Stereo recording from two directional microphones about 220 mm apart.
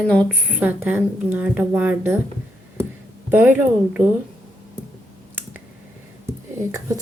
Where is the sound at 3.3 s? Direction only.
10° right (ahead or behind).